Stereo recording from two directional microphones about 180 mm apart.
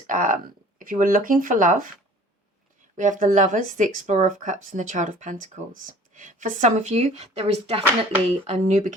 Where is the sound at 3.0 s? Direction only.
45° right (ahead or behind).